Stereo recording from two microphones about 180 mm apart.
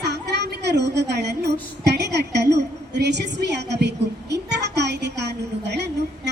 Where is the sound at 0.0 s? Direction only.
70° right (ahead or behind).